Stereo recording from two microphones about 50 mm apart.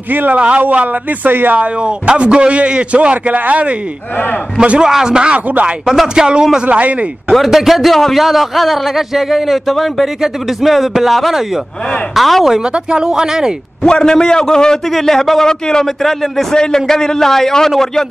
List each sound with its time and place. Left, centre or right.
0.1 s a man's voice: right
0.4 s a man's voice: right
1.6 s a man's voice: centre
4.6 s speech: centre
7.2 s a man's voice: centre
12.5 s speech: centre
13.8 s a man's voice: centre